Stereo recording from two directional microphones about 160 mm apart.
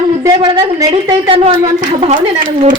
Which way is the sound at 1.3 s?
35° right (ahead or behind).